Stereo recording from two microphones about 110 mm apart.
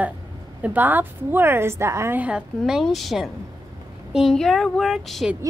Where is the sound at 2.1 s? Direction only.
10° right (ahead or behind).